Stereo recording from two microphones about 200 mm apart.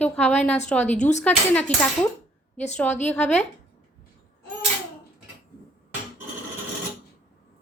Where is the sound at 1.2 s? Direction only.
5° left (ahead or behind).